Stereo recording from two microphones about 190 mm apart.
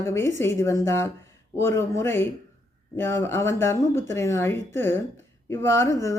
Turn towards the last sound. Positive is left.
turn(degrees=15)  # may be behind; listen again after turning